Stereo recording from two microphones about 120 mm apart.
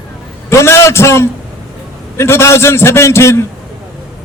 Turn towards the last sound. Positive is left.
turn(degrees=25)  # may be behind; listen again after turning